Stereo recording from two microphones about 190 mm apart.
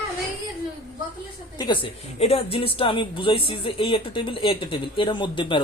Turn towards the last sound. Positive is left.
turn(degrees=25)  # may be behind; listen again after turning